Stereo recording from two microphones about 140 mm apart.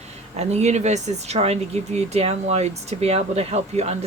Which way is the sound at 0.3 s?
50° right (ahead or behind).